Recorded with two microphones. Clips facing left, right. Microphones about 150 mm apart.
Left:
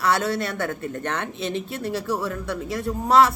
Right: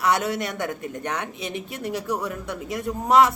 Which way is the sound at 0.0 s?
20° right (ahead or behind).